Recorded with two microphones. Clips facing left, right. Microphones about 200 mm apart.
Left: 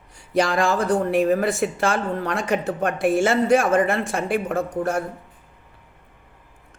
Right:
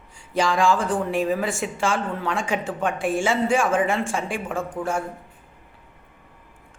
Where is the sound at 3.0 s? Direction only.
70° left (ahead or behind).